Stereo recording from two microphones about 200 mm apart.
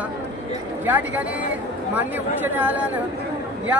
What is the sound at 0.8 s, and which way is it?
Speech, 10° right (ahead or behind).